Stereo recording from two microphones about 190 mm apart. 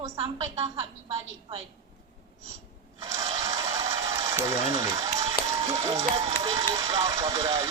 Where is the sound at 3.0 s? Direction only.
15° right (ahead or behind).